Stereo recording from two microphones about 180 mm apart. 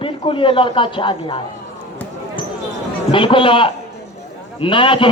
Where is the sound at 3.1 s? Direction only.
30° left (ahead or behind).